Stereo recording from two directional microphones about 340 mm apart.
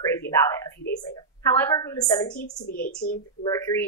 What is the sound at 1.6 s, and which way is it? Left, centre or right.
Speech, centre.